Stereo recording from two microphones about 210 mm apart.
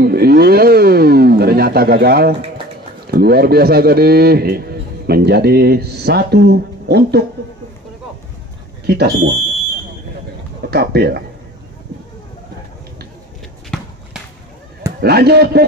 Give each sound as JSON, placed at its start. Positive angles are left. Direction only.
{"t": 0.0, "sound": "a sound", "side_deg": -50}
{"t": 3.1, "sound": "a man's voice", "side_deg": -50}
{"t": 8.8, "sound": "speech", "side_deg": -55}
{"t": 10.7, "sound": "a man's voice", "side_deg": -50}
{"t": 13.7, "sound": "basketball bounce", "side_deg": 5}
{"t": 15.0, "sound": "a man's voice", "side_deg": -50}